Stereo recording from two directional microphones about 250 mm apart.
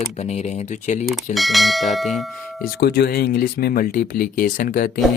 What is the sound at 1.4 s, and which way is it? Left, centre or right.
Speech, centre.